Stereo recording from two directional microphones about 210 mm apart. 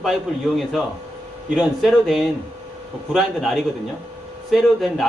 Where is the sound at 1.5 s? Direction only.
Centre (ahead or behind).